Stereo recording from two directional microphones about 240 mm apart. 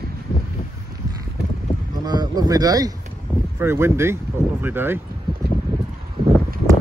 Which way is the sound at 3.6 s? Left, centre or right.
Centre.